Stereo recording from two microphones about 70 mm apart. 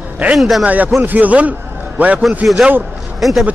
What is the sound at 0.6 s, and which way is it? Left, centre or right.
Speech, right.